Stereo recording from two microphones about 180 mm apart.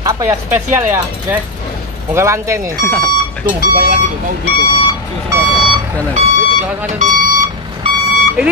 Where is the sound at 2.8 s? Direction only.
10° left (ahead or behind).